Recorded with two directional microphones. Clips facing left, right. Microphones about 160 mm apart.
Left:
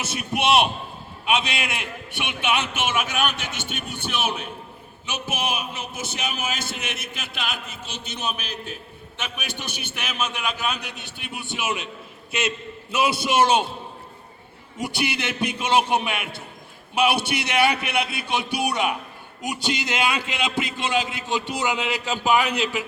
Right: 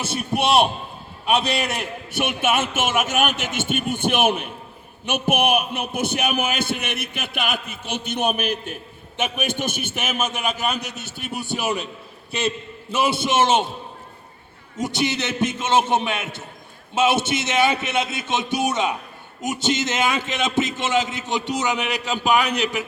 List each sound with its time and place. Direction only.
0.0 s a man's voice: 30° right (ahead or behind)
14.8 s a man's voice: 20° right (ahead or behind)